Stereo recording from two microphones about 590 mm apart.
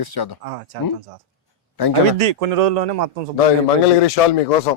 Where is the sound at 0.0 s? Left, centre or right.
Left.